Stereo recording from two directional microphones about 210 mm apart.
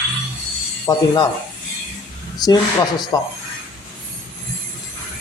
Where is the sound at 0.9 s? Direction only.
20° left (ahead or behind).